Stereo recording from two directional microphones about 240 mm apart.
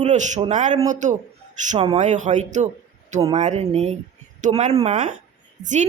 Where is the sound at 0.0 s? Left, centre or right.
Right.